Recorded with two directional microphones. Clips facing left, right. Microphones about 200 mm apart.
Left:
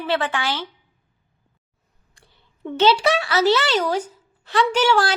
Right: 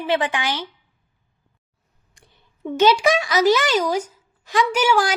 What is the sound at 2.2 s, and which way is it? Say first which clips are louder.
A woman's voice: right 1 dB; 20° right (ahead or behind).